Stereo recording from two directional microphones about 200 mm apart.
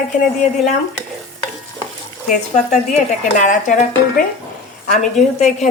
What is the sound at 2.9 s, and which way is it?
Speech, 40° left (ahead or behind).